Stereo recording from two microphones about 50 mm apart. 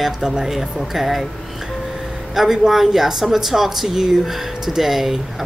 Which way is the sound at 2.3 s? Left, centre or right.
Centre.